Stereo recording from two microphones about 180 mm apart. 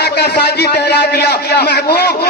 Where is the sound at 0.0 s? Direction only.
65° left (ahead or behind).